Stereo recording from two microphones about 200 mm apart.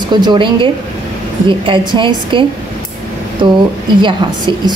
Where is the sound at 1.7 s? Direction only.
25° right (ahead or behind).